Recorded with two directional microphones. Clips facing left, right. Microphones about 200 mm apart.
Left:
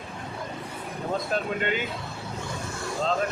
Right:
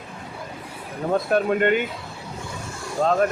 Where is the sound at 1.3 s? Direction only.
55° right (ahead or behind).